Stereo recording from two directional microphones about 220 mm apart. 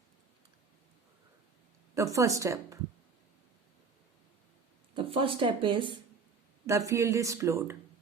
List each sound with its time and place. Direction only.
2.0 s speech: 15° right (ahead or behind)
4.9 s speech: 25° right (ahead or behind)